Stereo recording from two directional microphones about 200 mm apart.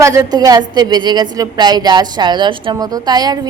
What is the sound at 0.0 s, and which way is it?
A woman's voice, 20° right (ahead or behind).